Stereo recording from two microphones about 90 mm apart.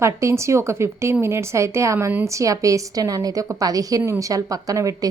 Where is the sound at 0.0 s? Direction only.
30° right (ahead or behind).